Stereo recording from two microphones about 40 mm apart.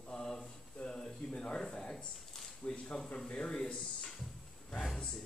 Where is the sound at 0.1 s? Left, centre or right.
Centre.